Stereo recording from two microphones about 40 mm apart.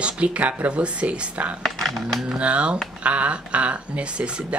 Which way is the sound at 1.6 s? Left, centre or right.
Centre.